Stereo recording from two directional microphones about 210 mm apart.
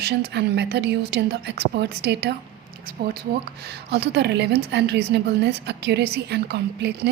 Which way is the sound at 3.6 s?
50° right (ahead or behind).